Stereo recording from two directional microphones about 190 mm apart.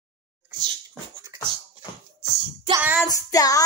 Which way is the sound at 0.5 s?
20° right (ahead or behind).